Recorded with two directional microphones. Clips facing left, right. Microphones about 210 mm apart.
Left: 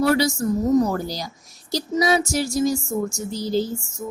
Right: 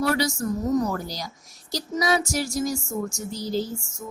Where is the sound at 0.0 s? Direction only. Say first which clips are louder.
Left 5 dB; 30° left (ahead or behind).